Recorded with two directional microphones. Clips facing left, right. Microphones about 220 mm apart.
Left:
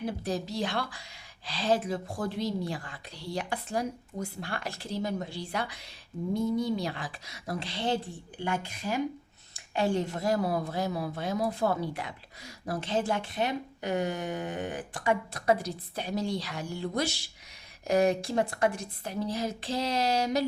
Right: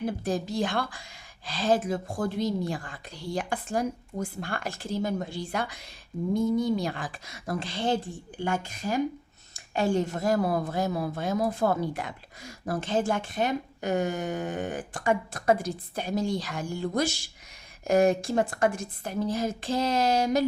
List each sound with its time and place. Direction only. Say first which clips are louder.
0.0 s a woman's voice: right 3 dB; 50° right (ahead or behind)